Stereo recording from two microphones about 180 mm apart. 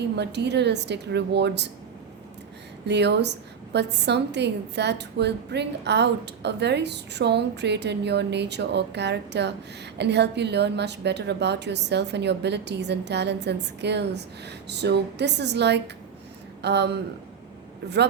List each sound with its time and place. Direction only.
0.2 s a woman's voice: 70° right (ahead or behind)
2.8 s a woman's voice: 70° right (ahead or behind)